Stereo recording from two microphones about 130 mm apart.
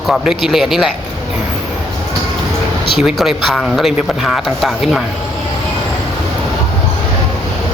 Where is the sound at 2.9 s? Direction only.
Centre (ahead or behind).